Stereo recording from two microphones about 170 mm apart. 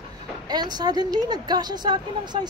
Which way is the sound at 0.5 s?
25° right (ahead or behind).